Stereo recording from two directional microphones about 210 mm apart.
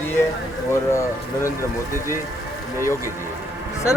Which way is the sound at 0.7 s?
15° left (ahead or behind).